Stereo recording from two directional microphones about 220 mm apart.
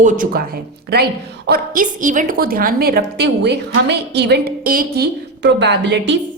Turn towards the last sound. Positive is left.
turn(degrees=-50)  # may be behind; listen again after turning